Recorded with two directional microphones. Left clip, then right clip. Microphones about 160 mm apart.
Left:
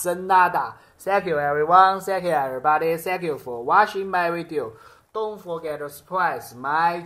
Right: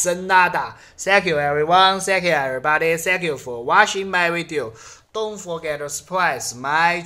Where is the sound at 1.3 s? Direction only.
30° right (ahead or behind).